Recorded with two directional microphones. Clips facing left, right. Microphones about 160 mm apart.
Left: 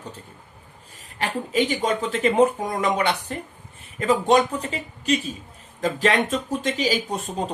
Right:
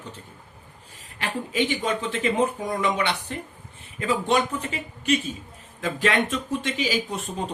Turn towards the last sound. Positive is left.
turn(degrees=40)  # may be behind; listen again after turning